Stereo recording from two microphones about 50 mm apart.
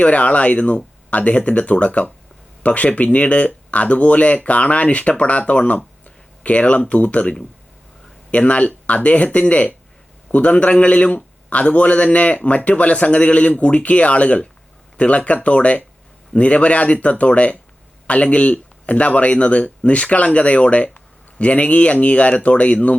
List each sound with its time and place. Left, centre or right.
0.0 s a man's voice: left